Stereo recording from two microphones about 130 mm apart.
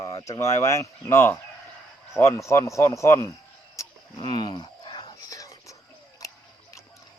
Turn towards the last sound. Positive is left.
turn(degrees=25)  # may be behind; listen again after turning